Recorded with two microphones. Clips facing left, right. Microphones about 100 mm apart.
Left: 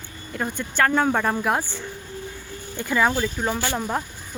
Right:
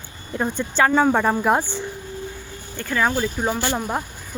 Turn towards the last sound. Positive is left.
turn(degrees=-10)  # may be behind; listen again after turning